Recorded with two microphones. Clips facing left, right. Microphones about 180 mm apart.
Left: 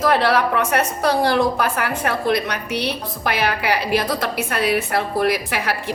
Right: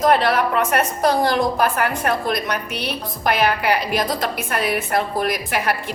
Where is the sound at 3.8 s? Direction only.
60° left (ahead or behind).